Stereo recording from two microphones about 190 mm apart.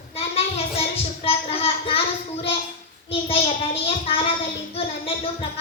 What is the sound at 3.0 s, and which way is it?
A child's voice, 30° left (ahead or behind).